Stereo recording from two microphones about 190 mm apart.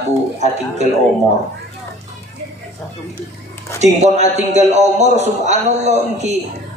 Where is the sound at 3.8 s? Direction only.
35° right (ahead or behind).